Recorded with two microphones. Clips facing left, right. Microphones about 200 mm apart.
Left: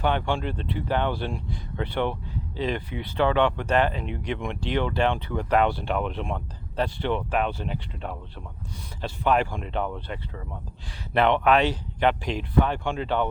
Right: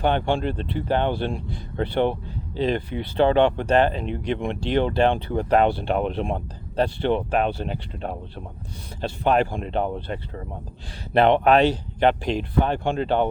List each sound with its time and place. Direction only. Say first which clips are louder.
0.0 s speech: right 4 dB; 30° right (ahead or behind)